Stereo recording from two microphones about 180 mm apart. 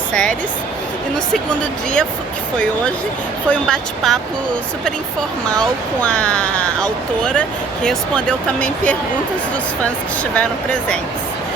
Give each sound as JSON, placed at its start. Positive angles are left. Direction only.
{"t": 0.1, "sound": "speech", "side_deg": 5}
{"t": 3.5, "sound": "speech", "side_deg": 5}
{"t": 6.0, "sound": "speech", "side_deg": 5}
{"t": 10.3, "sound": "speech", "side_deg": 5}